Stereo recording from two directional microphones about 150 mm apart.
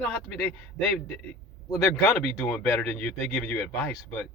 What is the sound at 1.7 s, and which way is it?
Speech, 20° left (ahead or behind).